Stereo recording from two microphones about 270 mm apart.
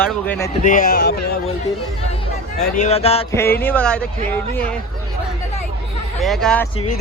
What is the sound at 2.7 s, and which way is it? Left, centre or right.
Speech, left.